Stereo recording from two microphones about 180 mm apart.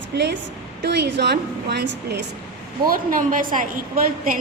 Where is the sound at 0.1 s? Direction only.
65° right (ahead or behind).